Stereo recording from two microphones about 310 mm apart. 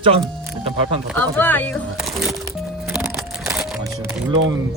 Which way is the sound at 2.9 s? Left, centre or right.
Centre.